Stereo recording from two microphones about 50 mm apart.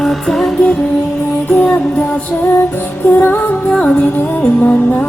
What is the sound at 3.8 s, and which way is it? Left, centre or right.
Music, left.